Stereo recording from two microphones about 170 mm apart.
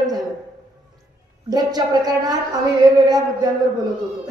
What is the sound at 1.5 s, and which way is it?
Speech, 25° right (ahead or behind).